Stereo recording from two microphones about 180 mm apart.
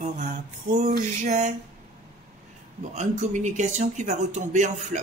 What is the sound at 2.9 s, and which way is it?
Speech, 40° right (ahead or behind).